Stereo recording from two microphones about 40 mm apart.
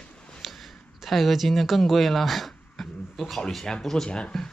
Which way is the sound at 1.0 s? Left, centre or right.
Centre.